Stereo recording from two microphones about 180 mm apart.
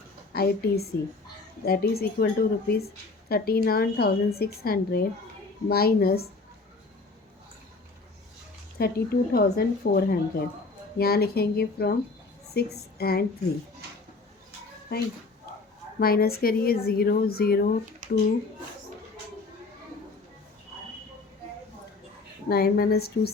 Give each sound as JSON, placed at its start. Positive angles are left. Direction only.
{"t": 0.3, "sound": "a woman's voice", "side_deg": 60}
{"t": 8.8, "sound": "a woman's voice", "side_deg": 60}
{"t": 16.0, "sound": "a woman's voice", "side_deg": 55}
{"t": 18.0, "sound": "a sound", "side_deg": -45}
{"t": 22.4, "sound": "a woman's voice", "side_deg": 55}